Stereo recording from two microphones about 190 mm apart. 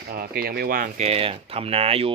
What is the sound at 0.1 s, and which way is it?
Speech, 50° right (ahead or behind).